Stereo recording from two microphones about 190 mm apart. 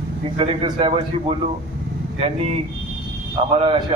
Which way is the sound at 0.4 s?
30° right (ahead or behind).